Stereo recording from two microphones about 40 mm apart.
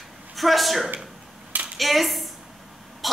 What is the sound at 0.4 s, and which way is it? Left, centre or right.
Speech, centre.